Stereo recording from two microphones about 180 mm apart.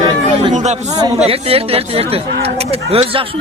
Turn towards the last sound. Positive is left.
turn(degrees=-35)  # may be behind; listen again after turning